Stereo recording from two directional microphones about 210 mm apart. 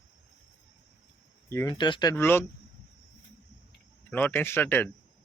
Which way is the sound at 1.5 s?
15° left (ahead or behind).